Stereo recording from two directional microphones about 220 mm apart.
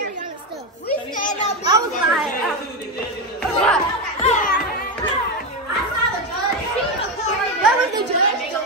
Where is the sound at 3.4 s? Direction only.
5° left (ahead or behind).